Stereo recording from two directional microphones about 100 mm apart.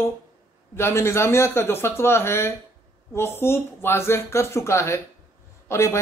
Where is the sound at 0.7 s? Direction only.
25° left (ahead or behind).